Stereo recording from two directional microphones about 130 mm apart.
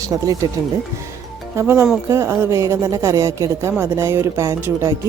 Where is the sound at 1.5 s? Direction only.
20° right (ahead or behind).